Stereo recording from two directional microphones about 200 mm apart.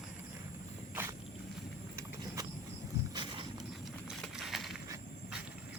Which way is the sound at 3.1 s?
25° right (ahead or behind).